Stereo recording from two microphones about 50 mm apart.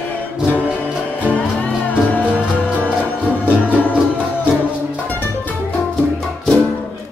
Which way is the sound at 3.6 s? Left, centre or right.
Left.